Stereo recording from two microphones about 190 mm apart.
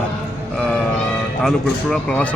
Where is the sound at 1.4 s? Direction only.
5° left (ahead or behind).